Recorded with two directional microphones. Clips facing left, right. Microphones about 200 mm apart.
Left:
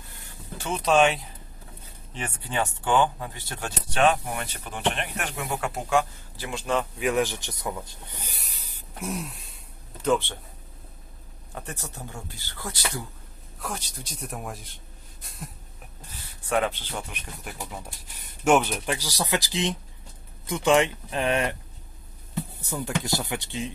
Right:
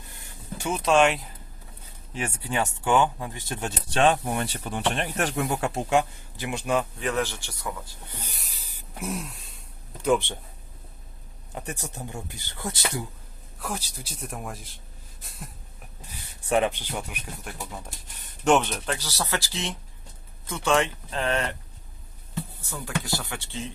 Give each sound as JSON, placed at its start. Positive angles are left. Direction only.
{"t": 0.0, "sound": "a sound", "side_deg": -15}
{"t": 0.7, "sound": "speech", "side_deg": 0}
{"t": 7.0, "sound": "speech", "side_deg": 15}
{"t": 8.4, "sound": "speech", "side_deg": 0}
{"t": 9.0, "sound": "throat clearing", "side_deg": 0}
{"t": 10.0, "sound": "speech", "side_deg": -15}
{"t": 11.5, "sound": "speech", "side_deg": -15}
{"t": 13.6, "sound": "speech", "side_deg": -5}
{"t": 16.1, "sound": "speech", "side_deg": -15}
{"t": 17.4, "sound": "speech", "side_deg": 5}